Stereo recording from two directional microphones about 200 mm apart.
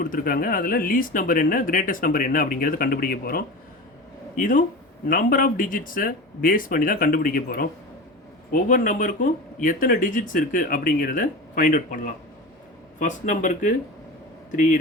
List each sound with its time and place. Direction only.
0.0 s speech: 45° left (ahead or behind)